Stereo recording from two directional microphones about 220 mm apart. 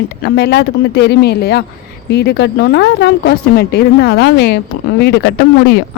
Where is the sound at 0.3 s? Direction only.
50° left (ahead or behind).